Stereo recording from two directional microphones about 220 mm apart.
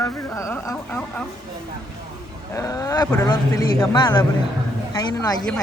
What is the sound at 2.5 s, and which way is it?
Speech, 15° left (ahead or behind).